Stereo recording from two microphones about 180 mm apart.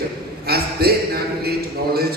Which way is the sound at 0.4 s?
60° right (ahead or behind).